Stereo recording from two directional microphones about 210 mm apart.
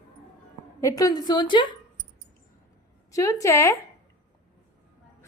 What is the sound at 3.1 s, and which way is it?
Speech, 15° left (ahead or behind).